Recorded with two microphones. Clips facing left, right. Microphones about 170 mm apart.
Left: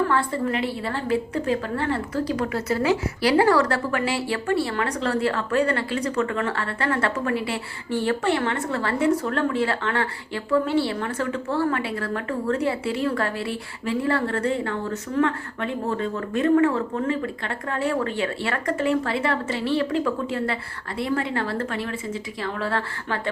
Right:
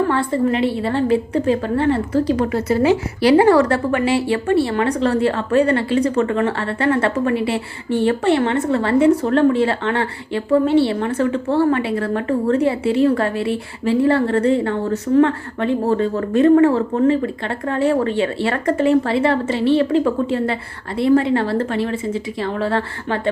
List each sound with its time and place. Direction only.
0.1 s a woman's voice: 25° right (ahead or behind)